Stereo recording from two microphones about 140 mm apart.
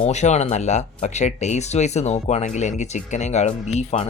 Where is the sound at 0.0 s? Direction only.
55° left (ahead or behind).